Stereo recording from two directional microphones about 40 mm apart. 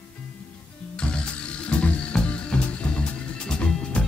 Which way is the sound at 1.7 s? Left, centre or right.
Left.